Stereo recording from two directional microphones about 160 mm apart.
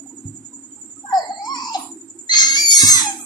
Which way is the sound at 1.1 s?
25° left (ahead or behind).